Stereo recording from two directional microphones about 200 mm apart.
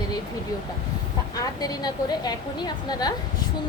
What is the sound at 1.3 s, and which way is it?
A woman's voice, 20° left (ahead or behind).